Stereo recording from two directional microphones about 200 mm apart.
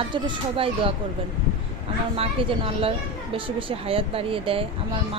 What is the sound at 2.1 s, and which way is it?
Speech, 30° right (ahead or behind).